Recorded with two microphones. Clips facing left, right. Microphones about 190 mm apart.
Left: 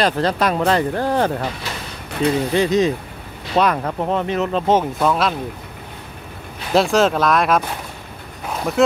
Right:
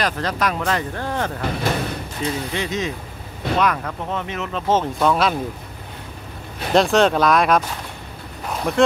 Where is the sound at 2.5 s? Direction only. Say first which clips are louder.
Left 8 dB; 35° left (ahead or behind).